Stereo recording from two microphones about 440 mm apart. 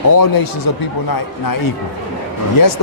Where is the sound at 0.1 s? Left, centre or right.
Left.